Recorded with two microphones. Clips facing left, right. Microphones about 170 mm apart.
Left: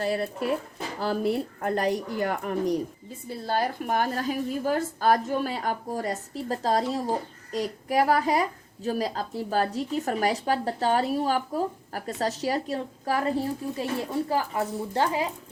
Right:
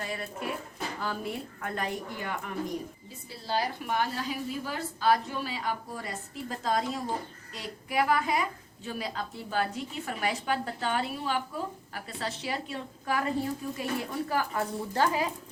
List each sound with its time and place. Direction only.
0.0 s a woman's voice: 35° left (ahead or behind)
3.2 s a woman's voice: 50° left (ahead or behind); by 15.3 s 25° left (ahead or behind)